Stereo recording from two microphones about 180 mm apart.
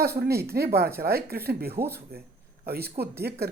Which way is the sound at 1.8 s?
15° right (ahead or behind).